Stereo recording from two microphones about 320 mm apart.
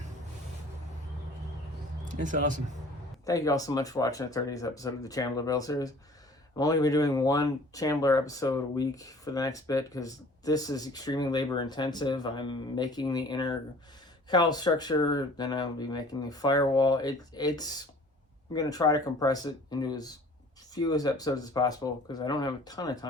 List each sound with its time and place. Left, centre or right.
2.2 s speech: right
3.2 s speech: centre